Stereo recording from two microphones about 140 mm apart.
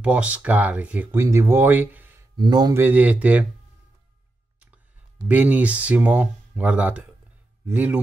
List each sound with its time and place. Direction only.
0.0 s speech: 10° right (ahead or behind)
2.3 s speech: 30° right (ahead or behind)
2.7 s speech: 15° right (ahead or behind)
5.3 s speech: 10° right (ahead or behind)